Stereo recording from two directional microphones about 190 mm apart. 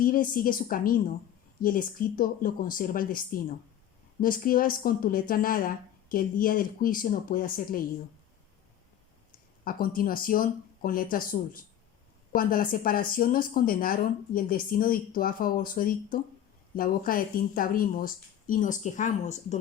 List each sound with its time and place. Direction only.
0.0 s speech: 45° left (ahead or behind)
9.6 s speech: 50° left (ahead or behind)